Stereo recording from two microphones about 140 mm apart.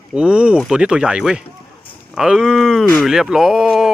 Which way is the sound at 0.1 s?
5° right (ahead or behind).